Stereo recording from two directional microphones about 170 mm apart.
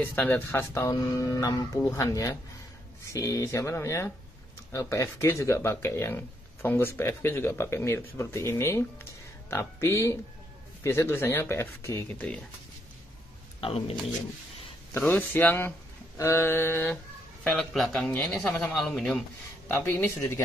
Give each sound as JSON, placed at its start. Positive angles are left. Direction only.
{"t": 0.0, "sound": "speech", "side_deg": 10}
{"t": 13.6, "sound": "speech", "side_deg": 35}
{"t": 15.0, "sound": "speech", "side_deg": 10}